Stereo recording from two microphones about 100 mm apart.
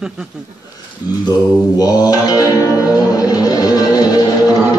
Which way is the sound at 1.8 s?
40° left (ahead or behind).